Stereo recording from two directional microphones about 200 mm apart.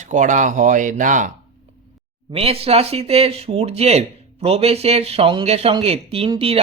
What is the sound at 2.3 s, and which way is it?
Speech, 30° right (ahead or behind).